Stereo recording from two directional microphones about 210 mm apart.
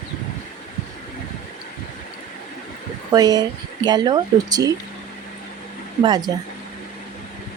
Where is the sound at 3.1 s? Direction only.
20° right (ahead or behind).